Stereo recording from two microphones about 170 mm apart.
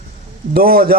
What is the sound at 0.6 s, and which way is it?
Speech, 60° right (ahead or behind).